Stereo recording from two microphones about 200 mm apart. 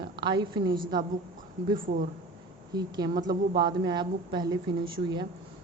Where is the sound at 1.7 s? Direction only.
45° right (ahead or behind).